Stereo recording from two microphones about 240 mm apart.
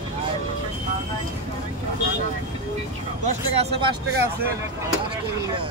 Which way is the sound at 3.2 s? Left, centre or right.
Right.